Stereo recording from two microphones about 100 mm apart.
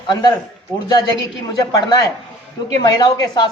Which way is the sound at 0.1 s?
45° left (ahead or behind).